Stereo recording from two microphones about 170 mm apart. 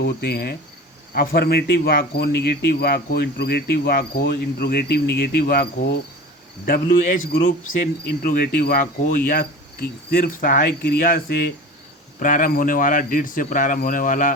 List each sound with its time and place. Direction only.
0.0 s speech: 75° left (ahead or behind)
12.2 s speech: 50° left (ahead or behind)